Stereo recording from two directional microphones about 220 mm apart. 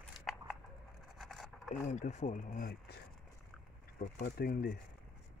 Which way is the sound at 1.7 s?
35° left (ahead or behind).